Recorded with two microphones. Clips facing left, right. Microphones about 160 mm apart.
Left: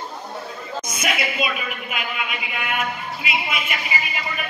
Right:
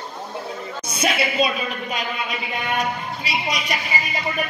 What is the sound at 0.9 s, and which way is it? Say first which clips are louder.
Speech: right 4 dB; 30° right (ahead or behind).